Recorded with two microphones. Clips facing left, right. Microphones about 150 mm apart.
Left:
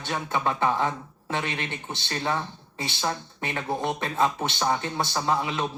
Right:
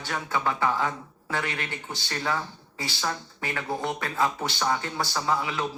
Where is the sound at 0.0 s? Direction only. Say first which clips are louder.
Left 1 dB; 20° left (ahead or behind).